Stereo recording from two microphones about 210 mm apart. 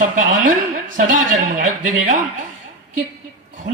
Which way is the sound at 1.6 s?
40° right (ahead or behind).